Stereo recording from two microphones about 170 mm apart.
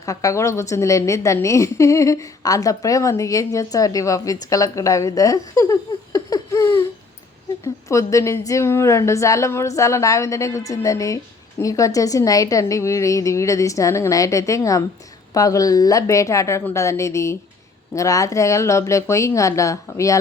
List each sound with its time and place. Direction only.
0.0 s a woman's voice: 20° left (ahead or behind)
6.1 s a sound: 20° left (ahead or behind)
7.6 s a woman's voice: 20° left (ahead or behind)